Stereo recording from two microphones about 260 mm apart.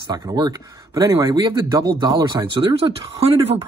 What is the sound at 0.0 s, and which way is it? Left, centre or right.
Speech, centre.